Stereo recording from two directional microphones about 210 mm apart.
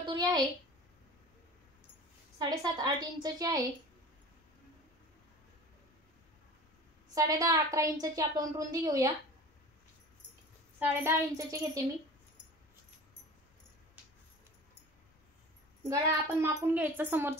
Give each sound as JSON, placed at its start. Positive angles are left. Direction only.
{"t": 0.1, "sound": "a sound", "side_deg": -20}
{"t": 2.3, "sound": "a woman's voice", "side_deg": -20}
{"t": 7.2, "sound": "a woman's voice", "side_deg": -15}
{"t": 11.1, "sound": "a woman's voice", "side_deg": -15}
{"t": 15.8, "sound": "a woman's voice", "side_deg": -15}